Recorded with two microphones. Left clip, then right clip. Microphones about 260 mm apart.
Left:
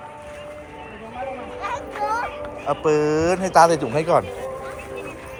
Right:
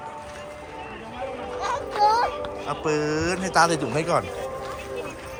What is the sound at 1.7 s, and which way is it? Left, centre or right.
Children playing, centre.